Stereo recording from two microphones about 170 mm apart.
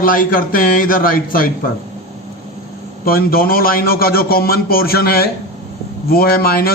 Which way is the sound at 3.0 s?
60° left (ahead or behind).